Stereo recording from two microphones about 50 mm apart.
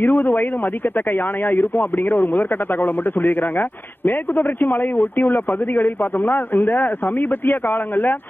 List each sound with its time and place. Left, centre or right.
0.0 s speech: left